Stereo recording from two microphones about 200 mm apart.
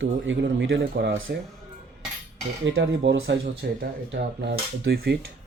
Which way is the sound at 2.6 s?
65° right (ahead or behind).